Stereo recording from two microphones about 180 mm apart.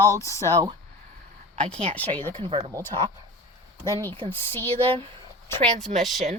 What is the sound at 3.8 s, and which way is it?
Speech, 15° left (ahead or behind).